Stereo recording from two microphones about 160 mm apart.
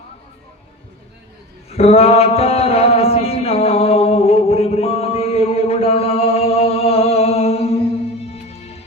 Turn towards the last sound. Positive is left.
turn(degrees=40)  # may be behind; listen again after turning